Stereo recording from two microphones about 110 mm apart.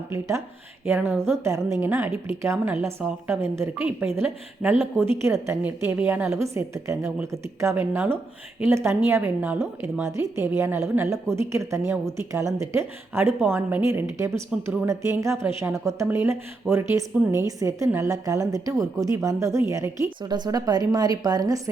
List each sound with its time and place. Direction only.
0.1 s a woman's voice: 25° right (ahead or behind)
6.5 s a woman's voice: 25° right (ahead or behind)
9.6 s a woman's voice: 25° right (ahead or behind)